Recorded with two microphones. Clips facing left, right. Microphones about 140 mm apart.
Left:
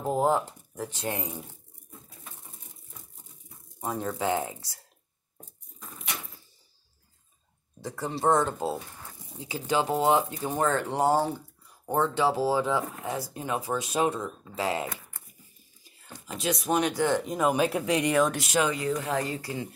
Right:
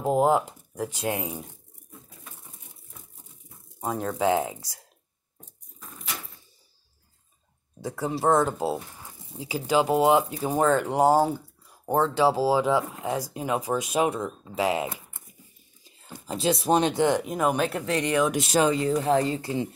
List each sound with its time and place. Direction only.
0.0 s speech: 15° right (ahead or behind)
3.8 s speech: 10° right (ahead or behind)
5.8 s a sound: centre (ahead or behind)
7.8 s speech: 10° right (ahead or behind)
16.3 s speech: 30° right (ahead or behind)
17.2 s speech: centre (ahead or behind)
18.4 s speech: 35° right (ahead or behind)